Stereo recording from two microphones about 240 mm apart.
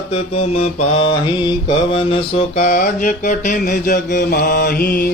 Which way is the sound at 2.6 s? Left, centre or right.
Left.